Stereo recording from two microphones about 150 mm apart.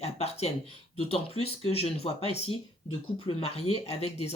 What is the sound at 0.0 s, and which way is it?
Speech, 45° left (ahead or behind).